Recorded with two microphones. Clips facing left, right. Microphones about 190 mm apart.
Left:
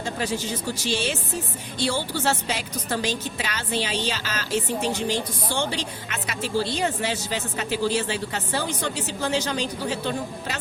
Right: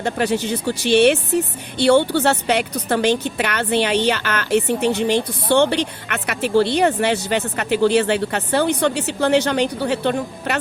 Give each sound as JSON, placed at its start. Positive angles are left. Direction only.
{"t": 0.0, "sound": "a woman's voice", "side_deg": -65}